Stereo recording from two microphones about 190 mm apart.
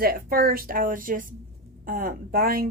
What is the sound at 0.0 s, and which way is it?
A woman's voice, 50° right (ahead or behind).